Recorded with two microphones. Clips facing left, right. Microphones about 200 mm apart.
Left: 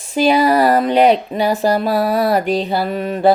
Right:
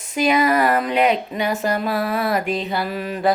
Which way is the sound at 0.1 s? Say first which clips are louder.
Left 4 dB; 30° left (ahead or behind).